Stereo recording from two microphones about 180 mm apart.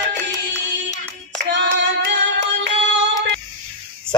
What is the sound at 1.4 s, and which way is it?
Hands, 75° right (ahead or behind).